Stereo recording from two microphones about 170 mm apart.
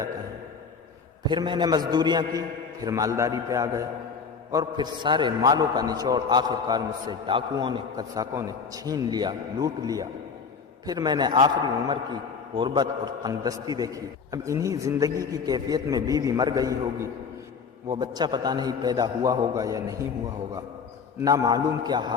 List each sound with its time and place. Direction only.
1.3 s a man's voice: 25° right (ahead or behind)